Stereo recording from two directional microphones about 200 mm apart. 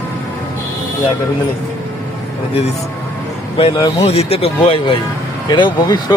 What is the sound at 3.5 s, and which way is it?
Speech, 25° left (ahead or behind).